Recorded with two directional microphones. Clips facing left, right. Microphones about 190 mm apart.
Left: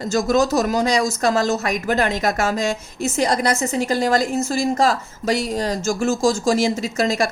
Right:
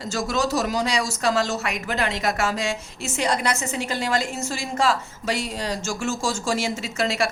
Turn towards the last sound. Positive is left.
turn(degrees=40)  # may be behind; listen again after turning